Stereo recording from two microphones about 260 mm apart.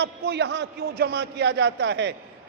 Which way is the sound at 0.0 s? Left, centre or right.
Right.